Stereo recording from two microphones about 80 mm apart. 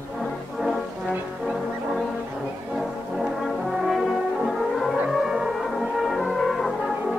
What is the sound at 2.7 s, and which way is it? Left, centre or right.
Brass instrument, centre.